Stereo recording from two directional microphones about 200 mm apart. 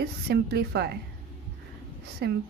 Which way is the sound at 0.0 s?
55° right (ahead or behind).